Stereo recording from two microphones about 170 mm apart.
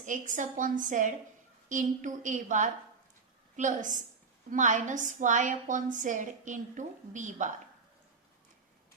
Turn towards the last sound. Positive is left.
turn(degrees=-45)  # may be behind; listen again after turning